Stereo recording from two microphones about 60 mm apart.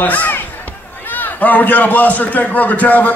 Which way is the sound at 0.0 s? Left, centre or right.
Left.